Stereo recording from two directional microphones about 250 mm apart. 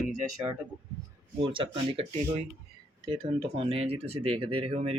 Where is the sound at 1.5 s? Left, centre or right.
Right.